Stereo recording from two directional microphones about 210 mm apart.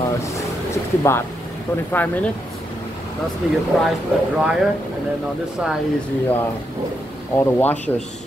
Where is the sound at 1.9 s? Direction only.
10° left (ahead or behind).